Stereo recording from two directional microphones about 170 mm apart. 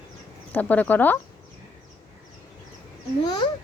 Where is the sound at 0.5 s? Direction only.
10° left (ahead or behind).